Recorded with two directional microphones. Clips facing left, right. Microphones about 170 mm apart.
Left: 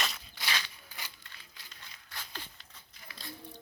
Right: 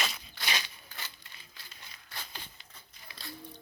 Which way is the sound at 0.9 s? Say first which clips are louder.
Right 1 dB; 15° left (ahead or behind).